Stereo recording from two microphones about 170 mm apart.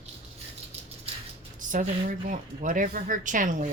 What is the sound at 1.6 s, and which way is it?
Speech, 50° right (ahead or behind).